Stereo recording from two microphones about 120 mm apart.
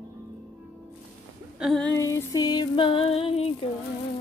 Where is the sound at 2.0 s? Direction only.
30° left (ahead or behind); by 3.5 s 55° left (ahead or behind).